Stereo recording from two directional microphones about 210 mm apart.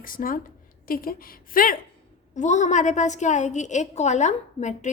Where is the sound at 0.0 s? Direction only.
40° left (ahead or behind).